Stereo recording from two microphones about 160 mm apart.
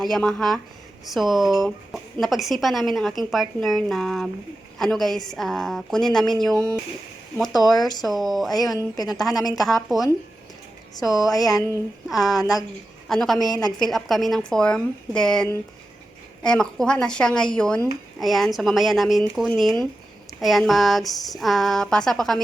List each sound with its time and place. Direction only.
0.0 s a woman's voice: centre (ahead or behind)
11.1 s a woman's voice: 20° left (ahead or behind)
11.3 s a woman's voice: centre (ahead or behind)
13.5 s a woman's voice: 25° left (ahead or behind)
13.7 s a woman's voice: centre (ahead or behind)